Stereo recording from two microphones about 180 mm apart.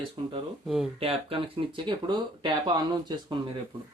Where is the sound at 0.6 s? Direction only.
Centre (ahead or behind).